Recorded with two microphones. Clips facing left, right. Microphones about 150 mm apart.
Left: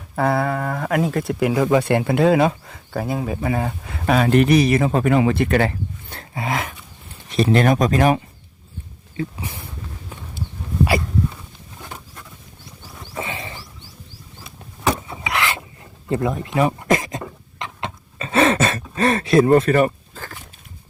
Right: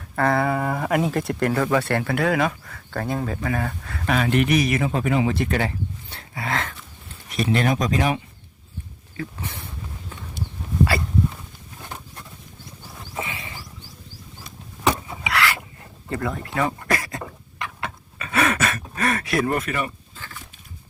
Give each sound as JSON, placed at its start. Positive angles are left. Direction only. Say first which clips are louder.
{"t": 0.2, "sound": "speech", "louder": "left 1 dB", "side_deg": 10}
{"t": 0.4, "sound": "speech", "louder": "even", "side_deg": -5}
{"t": 2.9, "sound": "speech", "louder": "left 2 dB", "side_deg": 5}
{"t": 3.4, "sound": "speech", "louder": "left 3 dB", "side_deg": 20}
{"t": 4.0, "sound": "speech", "louder": "left 5 dB", "side_deg": 40}
{"t": 5.1, "sound": "speech", "louder": "left 5 dB", "side_deg": 60}
{"t": 6.3, "sound": "speech", "louder": "left 3 dB", "side_deg": 15}
{"t": 7.3, "sound": "speech", "louder": "left 5 dB", "side_deg": 35}
{"t": 9.3, "sound": "speech", "louder": "left 2 dB", "side_deg": 10}
{"t": 13.1, "sound": "wild animals", "louder": "left 3 dB", "side_deg": 35}
{"t": 15.3, "sound": "filing", "louder": "even", "side_deg": 20}
{"t": 16.0, "sound": "a sound", "louder": "left 6 dB", "side_deg": 20}
{"t": 19.7, "sound": "a sound", "louder": "left 11 dB", "side_deg": 45}